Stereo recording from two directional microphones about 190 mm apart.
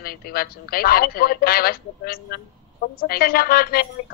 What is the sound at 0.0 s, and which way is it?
Speech, 50° left (ahead or behind).